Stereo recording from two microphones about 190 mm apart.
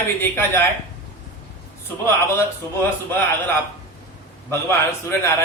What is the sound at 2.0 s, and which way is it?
A man's voice, 10° left (ahead or behind).